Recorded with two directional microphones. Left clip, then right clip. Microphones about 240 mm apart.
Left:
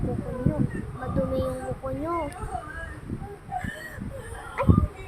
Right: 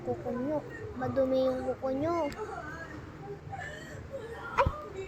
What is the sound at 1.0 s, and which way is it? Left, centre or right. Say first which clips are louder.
Speech: right 1 dB; centre.